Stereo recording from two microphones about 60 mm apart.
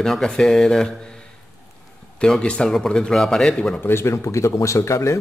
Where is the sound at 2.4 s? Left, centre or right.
Centre.